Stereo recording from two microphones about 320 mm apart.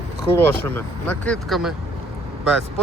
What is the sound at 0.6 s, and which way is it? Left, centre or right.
Speech, centre.